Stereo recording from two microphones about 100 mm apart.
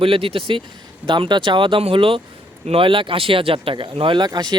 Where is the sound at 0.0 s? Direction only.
70° right (ahead or behind).